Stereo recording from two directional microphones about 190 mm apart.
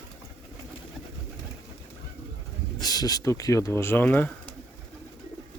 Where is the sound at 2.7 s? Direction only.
20° left (ahead or behind).